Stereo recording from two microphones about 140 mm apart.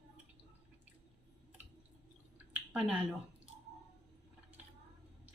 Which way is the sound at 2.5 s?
10° right (ahead or behind).